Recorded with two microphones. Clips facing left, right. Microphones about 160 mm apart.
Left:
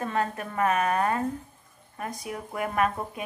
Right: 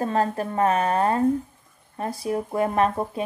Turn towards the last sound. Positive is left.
turn(degrees=-30)  # may be behind; listen again after turning